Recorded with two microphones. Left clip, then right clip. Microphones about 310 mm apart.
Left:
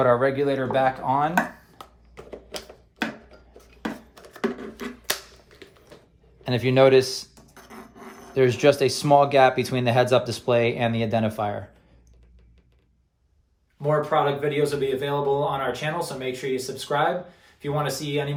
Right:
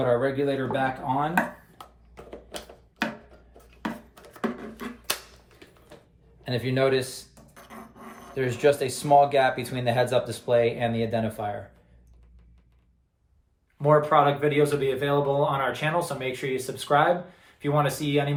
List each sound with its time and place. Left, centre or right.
0.0 s speech: centre
1.4 s finger snapping: centre
3.0 s a sound: centre
6.4 s speech: left
7.5 s dog: centre
8.4 s speech: left
13.8 s speech: centre